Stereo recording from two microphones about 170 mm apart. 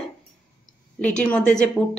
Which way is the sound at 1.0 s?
5° left (ahead or behind).